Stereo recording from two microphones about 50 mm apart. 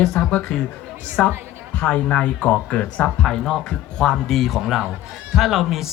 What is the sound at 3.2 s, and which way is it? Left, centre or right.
Speech, centre.